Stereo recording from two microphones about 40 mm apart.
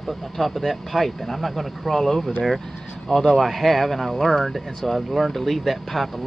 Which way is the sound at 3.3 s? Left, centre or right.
Centre.